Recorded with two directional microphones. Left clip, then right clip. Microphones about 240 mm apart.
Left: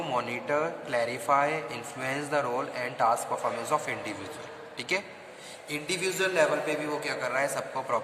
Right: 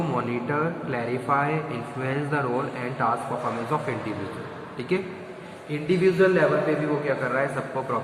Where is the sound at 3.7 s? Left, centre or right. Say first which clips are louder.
Even; left.